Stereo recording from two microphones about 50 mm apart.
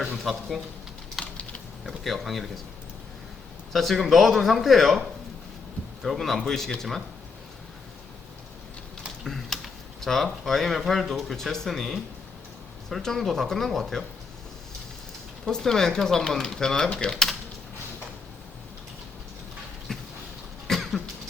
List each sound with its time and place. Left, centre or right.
0.2 s speech: centre
1.2 s typing: centre
1.9 s speech: centre
3.7 s speech: centre
6.0 s speech: centre
9.2 s a sound: centre
10.0 s speech: centre
15.4 s speech: centre
19.9 s a sound: centre
20.7 s cough: centre